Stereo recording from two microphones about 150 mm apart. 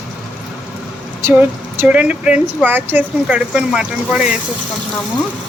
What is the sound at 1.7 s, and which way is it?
Speech, 10° right (ahead or behind).